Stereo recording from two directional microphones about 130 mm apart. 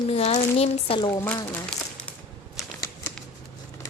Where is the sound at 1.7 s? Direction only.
5° left (ahead or behind).